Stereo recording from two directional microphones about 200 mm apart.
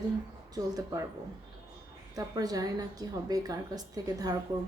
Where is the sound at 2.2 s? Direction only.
20° right (ahead or behind).